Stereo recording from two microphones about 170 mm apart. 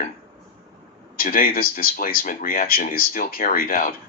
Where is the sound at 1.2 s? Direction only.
60° left (ahead or behind).